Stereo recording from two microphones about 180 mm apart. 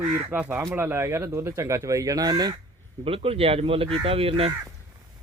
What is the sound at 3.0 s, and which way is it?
Speech, 30° right (ahead or behind).